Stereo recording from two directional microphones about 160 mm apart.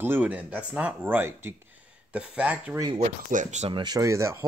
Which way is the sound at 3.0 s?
50° right (ahead or behind).